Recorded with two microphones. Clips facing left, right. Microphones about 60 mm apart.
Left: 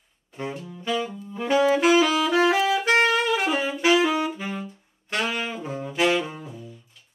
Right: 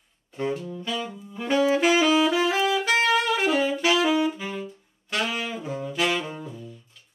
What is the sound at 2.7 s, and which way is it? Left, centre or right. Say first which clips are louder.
Music: left 2 dB; left.